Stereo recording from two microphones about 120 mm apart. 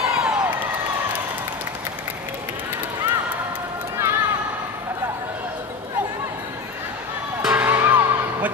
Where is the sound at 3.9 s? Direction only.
25° right (ahead or behind).